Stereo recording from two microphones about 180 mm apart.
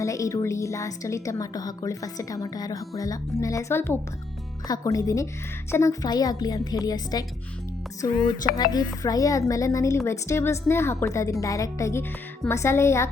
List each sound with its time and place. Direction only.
0.0 s a woman's voice: 15° left (ahead or behind)